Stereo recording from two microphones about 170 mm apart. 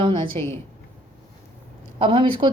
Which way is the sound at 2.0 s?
30° right (ahead or behind).